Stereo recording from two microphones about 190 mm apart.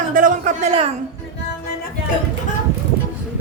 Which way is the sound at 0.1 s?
45° right (ahead or behind).